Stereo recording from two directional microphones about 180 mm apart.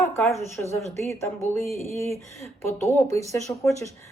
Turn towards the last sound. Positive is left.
turn(degrees=25)  # may be behind; listen again after turning